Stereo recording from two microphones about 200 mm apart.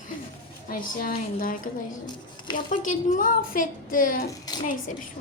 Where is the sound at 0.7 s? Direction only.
45° left (ahead or behind).